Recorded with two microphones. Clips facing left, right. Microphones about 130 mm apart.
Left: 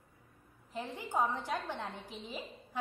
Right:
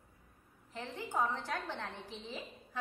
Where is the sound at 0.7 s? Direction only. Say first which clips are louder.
Left 2 dB; 10° left (ahead or behind).